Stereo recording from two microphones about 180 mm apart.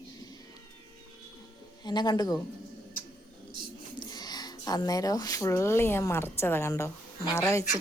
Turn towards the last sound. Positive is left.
turn(degrees=15)  # may be behind; listen again after turning